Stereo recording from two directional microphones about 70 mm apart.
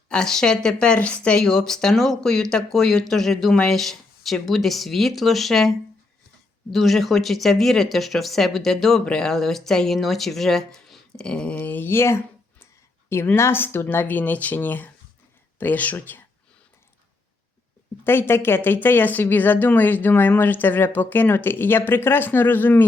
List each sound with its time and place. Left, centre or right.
0.1 s speech: centre
11.5 s speech: left
18.0 s speech: left